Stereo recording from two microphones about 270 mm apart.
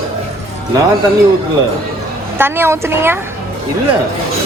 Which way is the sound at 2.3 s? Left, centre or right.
Centre.